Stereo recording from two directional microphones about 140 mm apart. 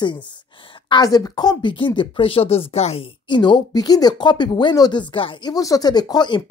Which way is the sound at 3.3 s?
35° left (ahead or behind).